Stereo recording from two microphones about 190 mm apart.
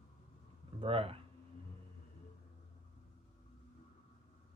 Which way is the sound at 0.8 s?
30° right (ahead or behind).